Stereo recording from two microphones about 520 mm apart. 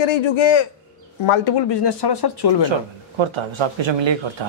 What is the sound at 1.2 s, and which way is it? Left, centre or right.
Speech, left.